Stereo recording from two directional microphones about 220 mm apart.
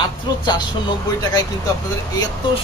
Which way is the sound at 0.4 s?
15° left (ahead or behind).